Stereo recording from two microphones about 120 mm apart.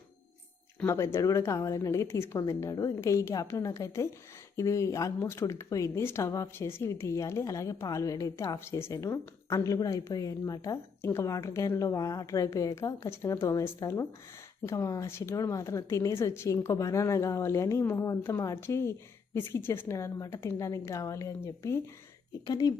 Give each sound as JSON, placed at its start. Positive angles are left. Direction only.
{"t": 0.9, "sound": "speech", "side_deg": 25}
{"t": 22.4, "sound": "speech", "side_deg": 35}